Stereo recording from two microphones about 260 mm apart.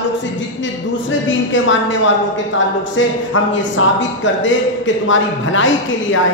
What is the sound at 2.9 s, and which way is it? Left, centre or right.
A man's voice, left.